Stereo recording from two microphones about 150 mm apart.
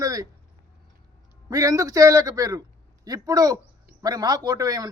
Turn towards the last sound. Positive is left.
turn(degrees=-25)  # may be behind; listen again after turning